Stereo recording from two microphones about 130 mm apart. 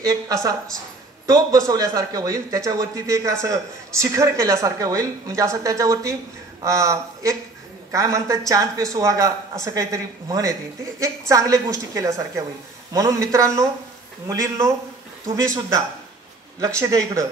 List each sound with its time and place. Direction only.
0.0 s speech: 25° right (ahead or behind)